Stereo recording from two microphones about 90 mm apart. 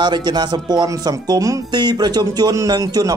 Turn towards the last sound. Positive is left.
turn(degrees=-45)  # may be behind; listen again after turning